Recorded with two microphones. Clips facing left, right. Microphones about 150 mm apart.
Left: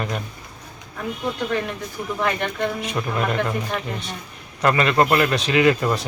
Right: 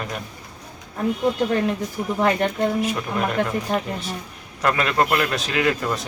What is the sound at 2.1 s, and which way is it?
Speech, 35° right (ahead or behind).